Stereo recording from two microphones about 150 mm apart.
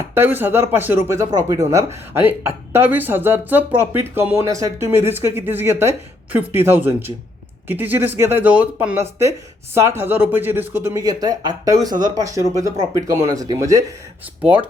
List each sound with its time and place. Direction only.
0.0 s speech: 15° right (ahead or behind)